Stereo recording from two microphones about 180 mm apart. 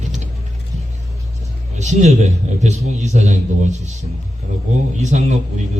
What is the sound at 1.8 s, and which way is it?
A man's voice, 40° right (ahead or behind).